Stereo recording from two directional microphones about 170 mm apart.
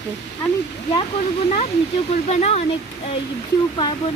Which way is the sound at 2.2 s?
40° left (ahead or behind).